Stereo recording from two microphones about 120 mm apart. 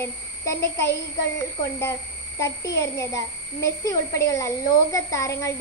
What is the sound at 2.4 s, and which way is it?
A child's voice, 25° left (ahead or behind).